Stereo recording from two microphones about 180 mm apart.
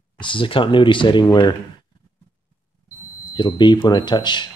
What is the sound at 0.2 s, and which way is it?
Speech, 30° left (ahead or behind).